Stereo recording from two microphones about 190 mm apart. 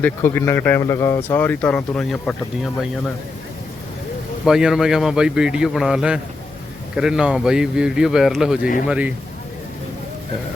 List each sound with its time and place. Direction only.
0.0 s speech: 10° left (ahead or behind)
4.4 s a man's voice: 5° right (ahead or behind)
8.6 s speech: 45° left (ahead or behind)
8.9 s a man's voice: 5° right (ahead or behind)